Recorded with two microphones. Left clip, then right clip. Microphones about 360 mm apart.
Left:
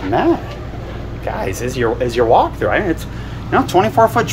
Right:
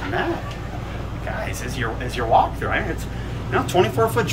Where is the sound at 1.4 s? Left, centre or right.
Centre.